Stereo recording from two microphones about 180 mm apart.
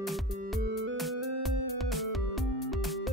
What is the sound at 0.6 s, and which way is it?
Music, 90° right.